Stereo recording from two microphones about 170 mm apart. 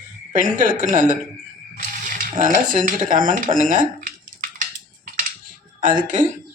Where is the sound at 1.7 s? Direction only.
50° right (ahead or behind).